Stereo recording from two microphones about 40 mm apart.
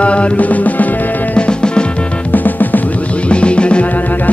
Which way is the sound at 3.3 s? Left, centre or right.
Left.